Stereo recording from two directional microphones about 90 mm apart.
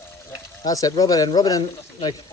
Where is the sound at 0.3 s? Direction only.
40° left (ahead or behind).